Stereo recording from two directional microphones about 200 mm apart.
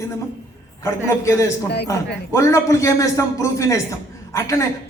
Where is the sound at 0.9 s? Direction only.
15° left (ahead or behind).